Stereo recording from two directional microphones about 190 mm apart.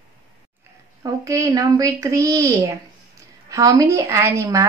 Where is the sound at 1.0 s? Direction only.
15° right (ahead or behind).